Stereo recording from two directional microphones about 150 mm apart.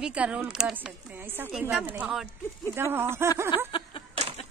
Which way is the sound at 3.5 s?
30° left (ahead or behind).